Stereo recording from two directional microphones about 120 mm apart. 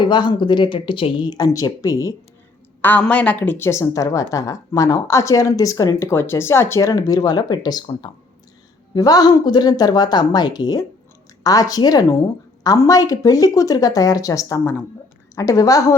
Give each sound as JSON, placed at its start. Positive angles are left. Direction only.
{"t": 0.0, "sound": "speech", "side_deg": 40}
{"t": 2.8, "sound": "a woman's voice", "side_deg": 15}